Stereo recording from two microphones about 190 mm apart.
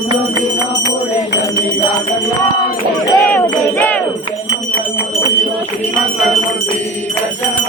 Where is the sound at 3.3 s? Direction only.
10° left (ahead or behind).